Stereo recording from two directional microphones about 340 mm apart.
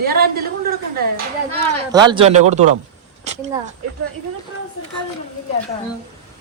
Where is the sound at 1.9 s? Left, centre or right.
Centre.